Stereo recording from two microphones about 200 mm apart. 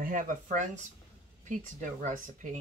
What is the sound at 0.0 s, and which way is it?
Speech, 40° right (ahead or behind).